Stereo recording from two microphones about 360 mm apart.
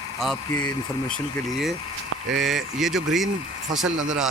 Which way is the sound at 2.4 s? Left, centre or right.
Centre.